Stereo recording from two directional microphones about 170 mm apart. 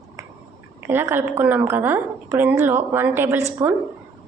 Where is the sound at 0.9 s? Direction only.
10° right (ahead or behind).